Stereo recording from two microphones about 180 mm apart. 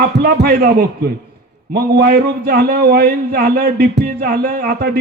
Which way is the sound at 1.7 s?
55° right (ahead or behind).